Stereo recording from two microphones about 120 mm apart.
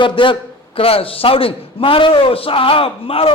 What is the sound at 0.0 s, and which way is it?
A man's voice, 45° left (ahead or behind).